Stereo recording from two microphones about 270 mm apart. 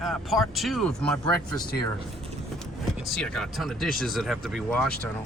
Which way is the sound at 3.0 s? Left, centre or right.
Centre.